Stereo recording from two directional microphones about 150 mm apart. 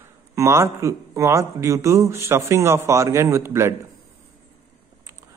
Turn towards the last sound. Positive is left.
turn(degrees=-15)  # may be behind; listen again after turning